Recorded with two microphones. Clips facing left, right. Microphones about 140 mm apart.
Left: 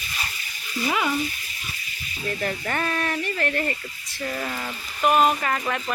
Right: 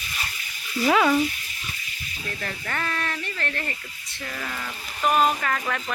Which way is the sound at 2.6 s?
25° left (ahead or behind).